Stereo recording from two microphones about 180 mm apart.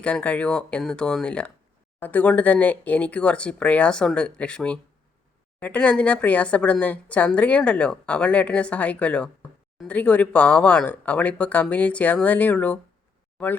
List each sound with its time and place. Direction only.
0.0 s speech: 5° left (ahead or behind)